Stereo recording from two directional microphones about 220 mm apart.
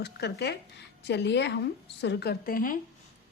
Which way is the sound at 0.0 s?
50° left (ahead or behind).